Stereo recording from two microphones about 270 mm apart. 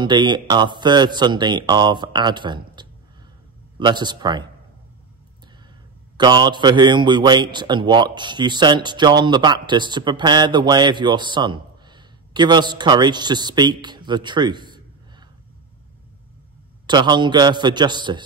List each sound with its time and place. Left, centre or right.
0.0 s a man's voice: centre
6.1 s a man's voice: centre
16.8 s a man's voice: centre